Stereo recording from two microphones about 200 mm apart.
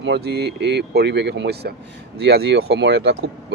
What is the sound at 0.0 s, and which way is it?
Speech, 55° right (ahead or behind).